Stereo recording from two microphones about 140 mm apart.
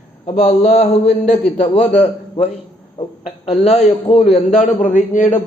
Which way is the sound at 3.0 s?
45° left (ahead or behind).